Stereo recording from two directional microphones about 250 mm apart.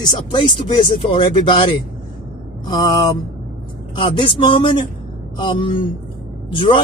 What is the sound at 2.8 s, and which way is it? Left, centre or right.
Speech, centre.